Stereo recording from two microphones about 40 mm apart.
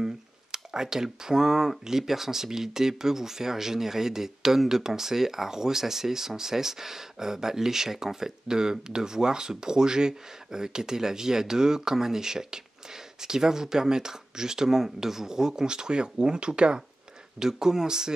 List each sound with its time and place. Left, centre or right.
0.0 s speech: centre